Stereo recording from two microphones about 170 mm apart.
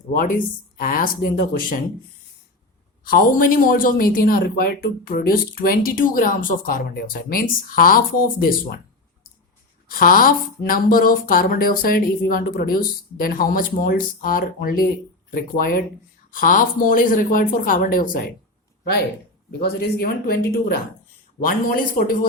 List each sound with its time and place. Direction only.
0.2 s speech: 55° left (ahead or behind)
3.0 s speech: 55° left (ahead or behind)
9.9 s speech: 55° left (ahead or behind)
19.5 s speech: 65° left (ahead or behind)